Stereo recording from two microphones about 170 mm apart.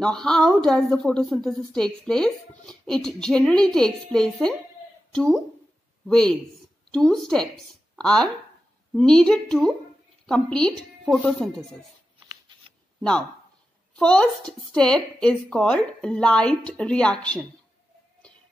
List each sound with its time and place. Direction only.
0.0 s a woman's voice: 5° left (ahead or behind)
12.3 s shuffling cards: 25° right (ahead or behind)
13.9 s a woman's voice: 5° left (ahead or behind)